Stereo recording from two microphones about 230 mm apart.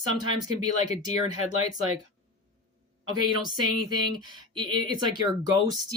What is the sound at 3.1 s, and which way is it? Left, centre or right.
Speech, centre.